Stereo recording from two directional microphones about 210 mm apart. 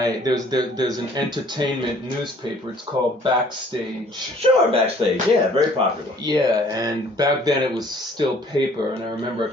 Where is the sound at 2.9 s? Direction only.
20° right (ahead or behind).